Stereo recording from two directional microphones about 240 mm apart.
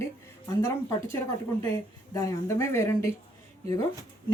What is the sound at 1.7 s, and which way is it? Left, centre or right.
Speech, centre.